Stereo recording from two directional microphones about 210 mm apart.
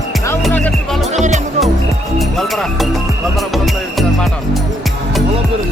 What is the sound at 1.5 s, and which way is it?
Music, centre (ahead or behind).